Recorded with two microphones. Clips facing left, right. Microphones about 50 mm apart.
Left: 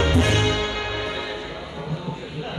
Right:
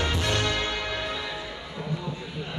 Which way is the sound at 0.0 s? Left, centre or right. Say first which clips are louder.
Left 6 dB; left.